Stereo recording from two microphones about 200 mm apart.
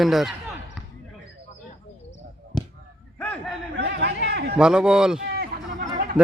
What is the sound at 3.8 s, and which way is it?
Chatter, 60° right (ahead or behind).